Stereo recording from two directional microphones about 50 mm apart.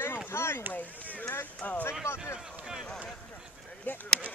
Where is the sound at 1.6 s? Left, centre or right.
Left.